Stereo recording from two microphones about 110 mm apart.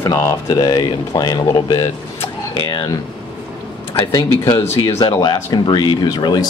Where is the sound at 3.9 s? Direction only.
45° left (ahead or behind).